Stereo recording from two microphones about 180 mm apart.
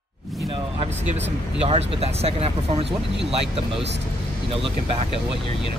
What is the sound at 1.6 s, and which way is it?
Speech, 35° right (ahead or behind).